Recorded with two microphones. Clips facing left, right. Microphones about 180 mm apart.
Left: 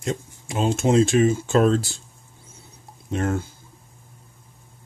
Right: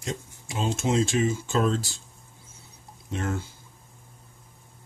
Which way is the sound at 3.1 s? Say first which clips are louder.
Left 6 dB; 50° left (ahead or behind).